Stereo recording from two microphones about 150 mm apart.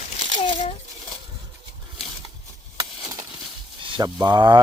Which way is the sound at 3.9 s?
25° right (ahead or behind).